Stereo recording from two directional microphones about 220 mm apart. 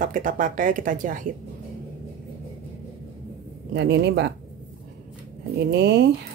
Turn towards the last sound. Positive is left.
turn(degrees=-50)  # may be behind; listen again after turning